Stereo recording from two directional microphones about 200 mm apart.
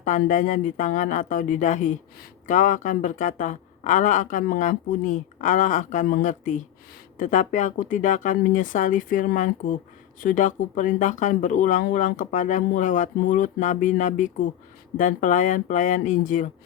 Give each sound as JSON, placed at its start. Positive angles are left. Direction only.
{"t": 0.3, "sound": "speech", "side_deg": 40}